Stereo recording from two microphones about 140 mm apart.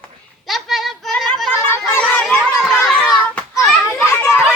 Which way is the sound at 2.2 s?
Centre (ahead or behind).